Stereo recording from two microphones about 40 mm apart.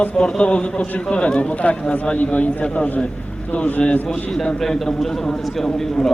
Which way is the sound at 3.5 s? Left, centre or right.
Left.